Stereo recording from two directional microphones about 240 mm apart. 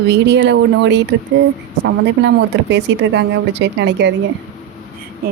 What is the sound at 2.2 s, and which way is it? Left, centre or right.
Speech, right.